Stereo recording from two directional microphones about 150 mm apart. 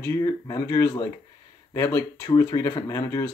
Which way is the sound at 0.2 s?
25° left (ahead or behind).